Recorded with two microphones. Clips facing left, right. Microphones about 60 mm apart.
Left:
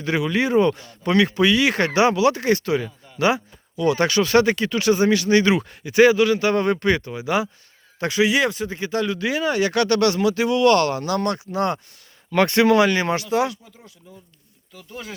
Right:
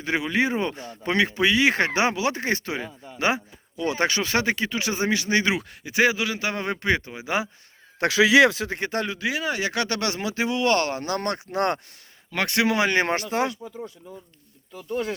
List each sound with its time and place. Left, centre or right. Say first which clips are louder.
0.0 s speech: left 2 dB; right
8.0 s speech: right 3 dB; right
9.1 s speech: left 5 dB; centre; by 11.6 s right
12.3 s speech: left 6 dB; centre
12.9 s speech: left 2 dB; right